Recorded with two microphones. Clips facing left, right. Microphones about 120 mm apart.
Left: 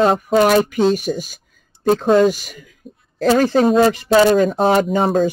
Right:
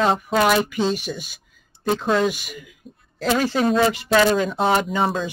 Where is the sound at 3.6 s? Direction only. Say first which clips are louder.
Left 5 dB; 30° left (ahead or behind).